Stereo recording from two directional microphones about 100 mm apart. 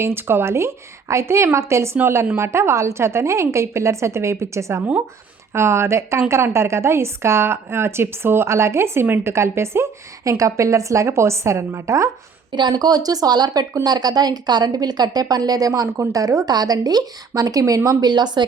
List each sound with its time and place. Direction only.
0.0 s a woman's voice: 25° right (ahead or behind)
12.5 s speech: 45° right (ahead or behind)